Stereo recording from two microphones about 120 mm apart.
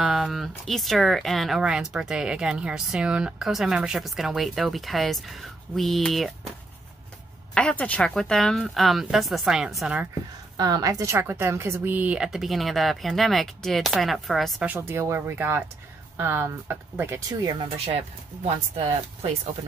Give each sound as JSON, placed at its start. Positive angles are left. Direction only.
{"t": 0.0, "sound": "speech", "side_deg": -5}
{"t": 7.5, "sound": "speech", "side_deg": 10}
{"t": 10.6, "sound": "speech", "side_deg": -30}
{"t": 14.7, "sound": "speech", "side_deg": -20}
{"t": 17.3, "sound": "speech", "side_deg": -35}